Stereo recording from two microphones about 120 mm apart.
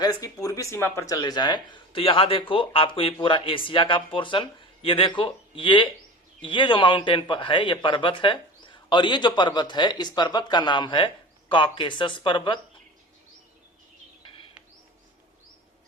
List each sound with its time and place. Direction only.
0.0 s speech: 30° left (ahead or behind)
1.1 s speech: 35° left (ahead or behind)
14.2 s a sound: 45° left (ahead or behind)